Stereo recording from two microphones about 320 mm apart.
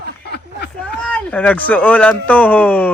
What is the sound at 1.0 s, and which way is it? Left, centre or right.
Mantra, centre.